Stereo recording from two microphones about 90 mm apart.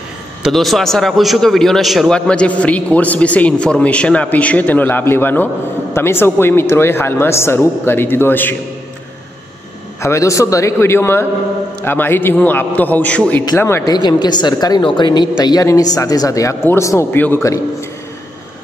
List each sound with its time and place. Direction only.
0.4 s a man's voice: centre (ahead or behind)
2.1 s a man's voice: 10° left (ahead or behind)
10.0 s speech: 35° left (ahead or behind); by 13.4 s 20° left (ahead or behind)
13.6 s speech: 30° left (ahead or behind)
13.8 s a woman's voice: 50° left (ahead or behind)
14.8 s speech: 60° left (ahead or behind)
15.6 s speech: 40° left (ahead or behind)